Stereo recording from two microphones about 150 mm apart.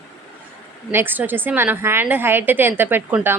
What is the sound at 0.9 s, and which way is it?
A woman's voice, 15° right (ahead or behind).